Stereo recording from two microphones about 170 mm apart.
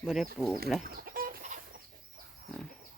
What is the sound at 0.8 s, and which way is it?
Chicken, 60° right (ahead or behind).